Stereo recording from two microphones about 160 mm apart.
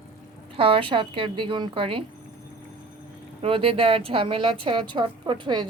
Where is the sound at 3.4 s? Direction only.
35° right (ahead or behind).